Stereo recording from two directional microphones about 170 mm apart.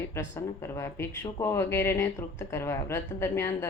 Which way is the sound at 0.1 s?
15° left (ahead or behind).